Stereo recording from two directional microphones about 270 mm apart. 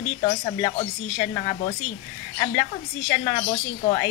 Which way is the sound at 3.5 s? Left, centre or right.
Left.